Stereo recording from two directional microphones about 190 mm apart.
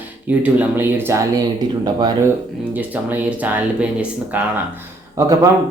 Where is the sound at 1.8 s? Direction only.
20° right (ahead or behind).